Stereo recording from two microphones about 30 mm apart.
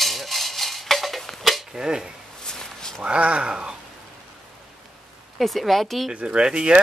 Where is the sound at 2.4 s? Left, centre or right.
Centre.